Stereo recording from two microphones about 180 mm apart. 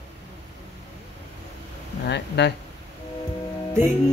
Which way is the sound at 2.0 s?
70° left (ahead or behind).